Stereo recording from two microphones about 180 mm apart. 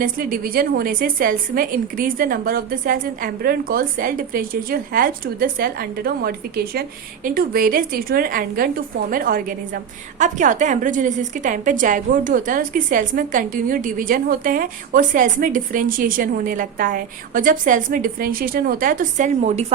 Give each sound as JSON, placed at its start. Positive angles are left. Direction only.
{"t": 0.0, "sound": "a woman's voice", "side_deg": -50}